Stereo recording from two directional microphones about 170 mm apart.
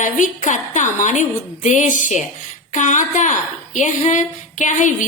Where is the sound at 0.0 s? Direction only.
50° left (ahead or behind).